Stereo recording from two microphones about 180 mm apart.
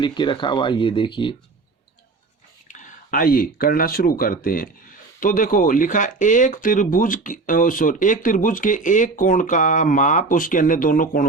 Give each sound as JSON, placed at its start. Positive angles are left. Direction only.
{"t": 0.0, "sound": "speech", "side_deg": 25}
{"t": 2.6, "sound": "speech", "side_deg": 45}